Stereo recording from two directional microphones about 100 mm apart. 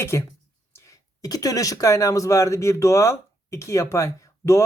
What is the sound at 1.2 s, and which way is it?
Speech, 40° left (ahead or behind).